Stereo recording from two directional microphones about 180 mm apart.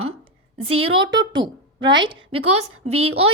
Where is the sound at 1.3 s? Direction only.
25° right (ahead or behind).